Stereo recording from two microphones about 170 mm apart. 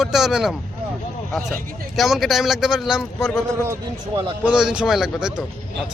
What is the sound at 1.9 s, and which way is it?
A man's voice, centre (ahead or behind).